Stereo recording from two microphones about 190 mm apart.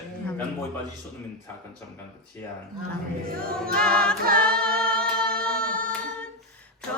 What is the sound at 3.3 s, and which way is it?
A capella, 50° right (ahead or behind).